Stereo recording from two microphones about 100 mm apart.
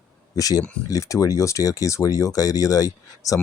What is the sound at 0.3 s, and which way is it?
Speech, 35° left (ahead or behind).